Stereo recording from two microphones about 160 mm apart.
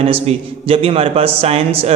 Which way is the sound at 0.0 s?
35° right (ahead or behind).